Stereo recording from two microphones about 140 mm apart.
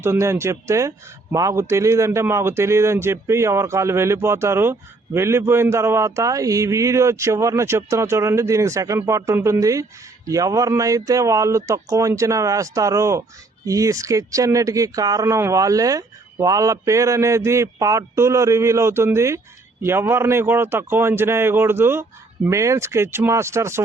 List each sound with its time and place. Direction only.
0.0 s speech: 20° right (ahead or behind)